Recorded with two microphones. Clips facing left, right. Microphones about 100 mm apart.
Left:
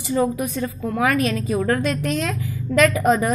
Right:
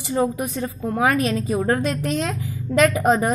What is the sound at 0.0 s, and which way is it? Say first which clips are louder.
A woman's voice: left 1 dB; 25° right (ahead or behind).